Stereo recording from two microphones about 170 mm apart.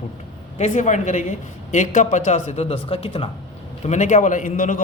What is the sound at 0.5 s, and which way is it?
Speech, 45° left (ahead or behind).